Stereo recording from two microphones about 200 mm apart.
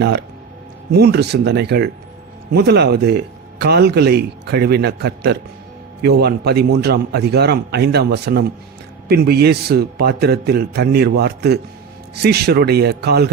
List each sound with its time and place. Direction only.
0.0 s a man's voice: 55° right (ahead or behind)